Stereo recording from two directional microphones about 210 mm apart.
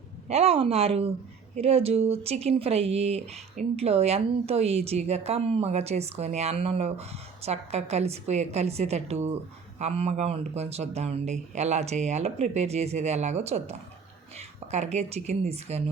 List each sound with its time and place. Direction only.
0.3 s speech: 30° right (ahead or behind)